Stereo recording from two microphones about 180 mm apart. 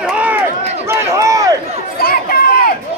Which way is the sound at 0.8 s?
15° right (ahead or behind).